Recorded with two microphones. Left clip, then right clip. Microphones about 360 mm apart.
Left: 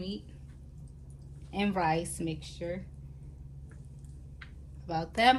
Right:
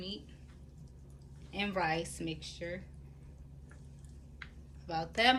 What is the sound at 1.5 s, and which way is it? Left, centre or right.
Speech, centre.